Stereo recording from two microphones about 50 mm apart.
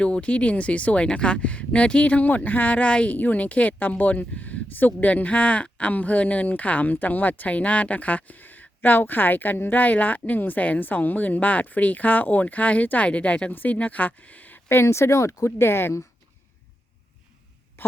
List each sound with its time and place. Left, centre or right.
0.0 s a woman's voice: left
13.5 s speech: left
14.7 s speech: left
15.4 s speech: left
17.8 s throat clearing: left